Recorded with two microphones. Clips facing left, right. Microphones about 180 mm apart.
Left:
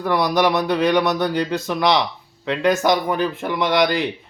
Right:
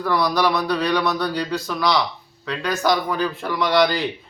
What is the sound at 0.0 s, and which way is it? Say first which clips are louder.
A man's voice: left 2 dB; 20° left (ahead or behind).